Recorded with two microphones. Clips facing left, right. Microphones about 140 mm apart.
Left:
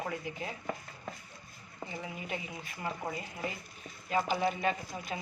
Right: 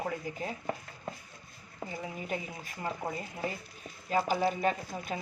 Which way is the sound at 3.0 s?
5° right (ahead or behind).